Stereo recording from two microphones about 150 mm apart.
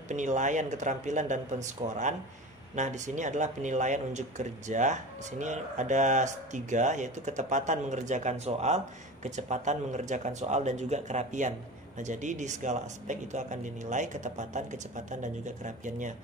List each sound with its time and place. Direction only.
0.1 s speech: 55° right (ahead or behind)